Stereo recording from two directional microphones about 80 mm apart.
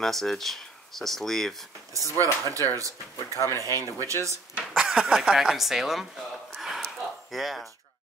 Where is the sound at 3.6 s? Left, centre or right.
Right.